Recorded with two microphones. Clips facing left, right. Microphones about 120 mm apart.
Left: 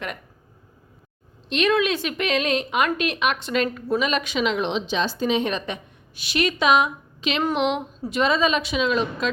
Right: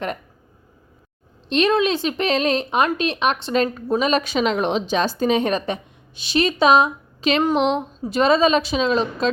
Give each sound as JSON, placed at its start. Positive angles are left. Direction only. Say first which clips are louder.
{"t": 1.5, "sound": "a woman's voice", "louder": "right 3 dB", "side_deg": -35}
{"t": 6.1, "sound": "a woman's voice", "louder": "right 4 dB", "side_deg": -30}